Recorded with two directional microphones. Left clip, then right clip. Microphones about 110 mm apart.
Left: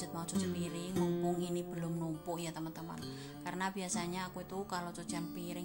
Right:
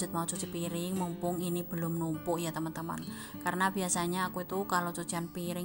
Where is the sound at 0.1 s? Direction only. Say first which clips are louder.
Right 4 dB; 60° right (ahead or behind).